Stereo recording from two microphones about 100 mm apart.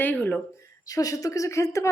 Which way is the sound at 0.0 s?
15° left (ahead or behind).